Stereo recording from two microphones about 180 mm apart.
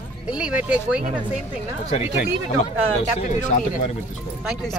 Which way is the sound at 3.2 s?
45° left (ahead or behind).